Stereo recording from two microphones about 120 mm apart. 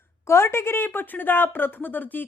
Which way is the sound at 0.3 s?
20° left (ahead or behind).